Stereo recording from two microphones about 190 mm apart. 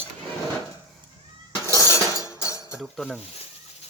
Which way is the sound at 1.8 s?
15° left (ahead or behind).